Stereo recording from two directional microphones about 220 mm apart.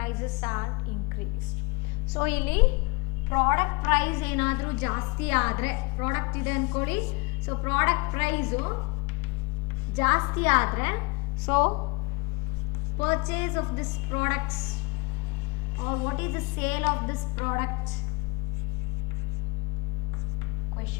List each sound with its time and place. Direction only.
0.0 s a woman's voice: 15° left (ahead or behind)
2.1 s a woman's voice: 10° left (ahead or behind)
9.9 s a woman's voice: 15° left (ahead or behind)
13.0 s a woman's voice: 10° left (ahead or behind)
15.8 s a woman's voice: 15° left (ahead or behind)